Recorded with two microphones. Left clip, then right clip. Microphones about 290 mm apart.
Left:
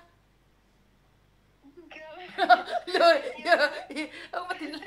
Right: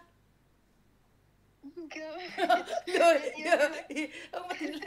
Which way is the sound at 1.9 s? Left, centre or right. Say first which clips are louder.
Right 2 dB; right.